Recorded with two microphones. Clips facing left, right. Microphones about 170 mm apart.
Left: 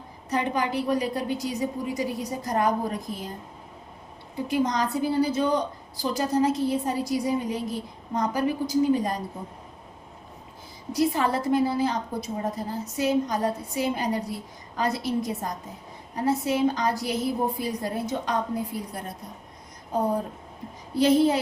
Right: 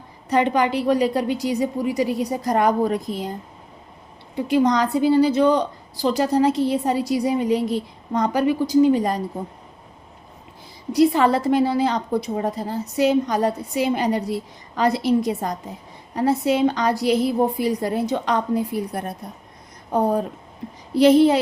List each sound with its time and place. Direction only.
0.3 s a woman's voice: 80° right
4.4 s a woman's voice: 75° right (ahead or behind)
10.9 s a woman's voice: 80° right